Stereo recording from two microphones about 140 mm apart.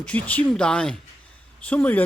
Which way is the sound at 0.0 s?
10° left (ahead or behind).